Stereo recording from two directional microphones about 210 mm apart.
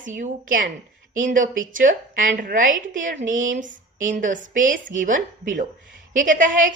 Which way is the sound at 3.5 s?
40° right (ahead or behind).